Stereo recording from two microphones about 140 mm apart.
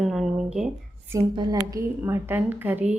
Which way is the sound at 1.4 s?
30° right (ahead or behind).